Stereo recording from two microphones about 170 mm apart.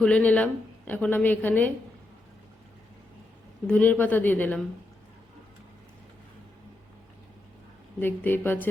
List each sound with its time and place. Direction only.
0.0 s a woman's voice: 5° left (ahead or behind)
3.7 s a woman's voice: 10° left (ahead or behind)
7.9 s a woman's voice: 10° left (ahead or behind)